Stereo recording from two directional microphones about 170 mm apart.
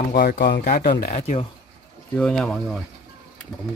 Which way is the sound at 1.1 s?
40° left (ahead or behind).